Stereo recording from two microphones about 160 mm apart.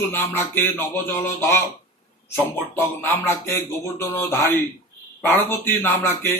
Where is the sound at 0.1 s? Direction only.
15° left (ahead or behind).